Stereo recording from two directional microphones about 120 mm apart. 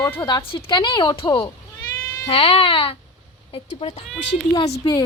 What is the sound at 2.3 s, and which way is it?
Speech, 55° left (ahead or behind).